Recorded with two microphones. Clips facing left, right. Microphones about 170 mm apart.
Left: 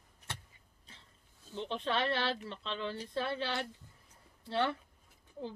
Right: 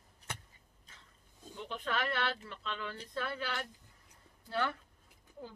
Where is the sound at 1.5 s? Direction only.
30° left (ahead or behind).